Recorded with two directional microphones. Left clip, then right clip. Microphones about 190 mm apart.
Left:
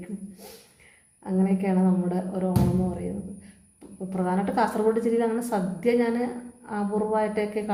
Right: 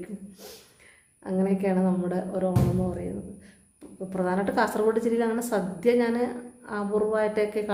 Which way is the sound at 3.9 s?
15° right (ahead or behind).